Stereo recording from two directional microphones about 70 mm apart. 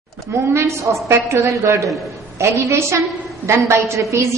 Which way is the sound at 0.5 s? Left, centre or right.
Right.